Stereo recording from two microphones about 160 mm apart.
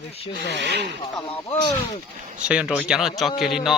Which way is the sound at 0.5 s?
90° right.